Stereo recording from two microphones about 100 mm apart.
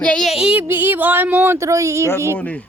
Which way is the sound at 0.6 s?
25° right (ahead or behind).